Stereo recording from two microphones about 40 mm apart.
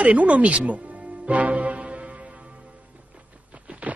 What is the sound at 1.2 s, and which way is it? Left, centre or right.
Music, right.